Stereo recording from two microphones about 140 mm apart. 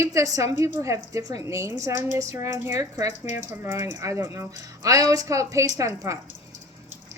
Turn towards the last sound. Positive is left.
turn(degrees=-20)  # may be behind; listen again after turning